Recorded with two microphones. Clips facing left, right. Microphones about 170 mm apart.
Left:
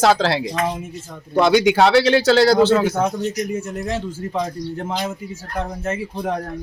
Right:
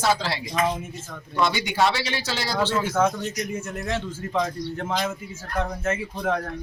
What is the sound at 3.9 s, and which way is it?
Speech, 10° left (ahead or behind).